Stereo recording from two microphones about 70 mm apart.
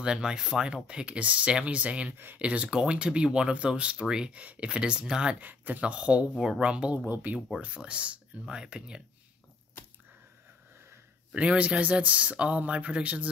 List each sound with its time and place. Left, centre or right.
0.0 s speech: centre
2.1 s speech: right
2.4 s speech: centre
5.4 s speech: right
6.3 s speech: centre
6.6 s speech: centre
7.1 s speech: right
7.5 s speech: centre
11.3 s speech: centre